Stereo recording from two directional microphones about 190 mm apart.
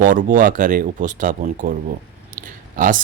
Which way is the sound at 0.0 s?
45° right (ahead or behind).